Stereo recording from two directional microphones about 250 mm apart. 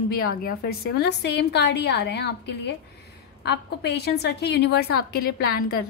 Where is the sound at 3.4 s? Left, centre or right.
Left.